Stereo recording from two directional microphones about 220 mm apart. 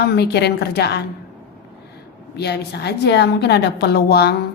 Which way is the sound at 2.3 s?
50° left (ahead or behind).